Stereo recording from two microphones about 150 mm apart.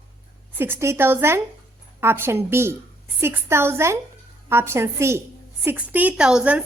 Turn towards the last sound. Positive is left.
turn(degrees=-5)  # may be behind; listen again after turning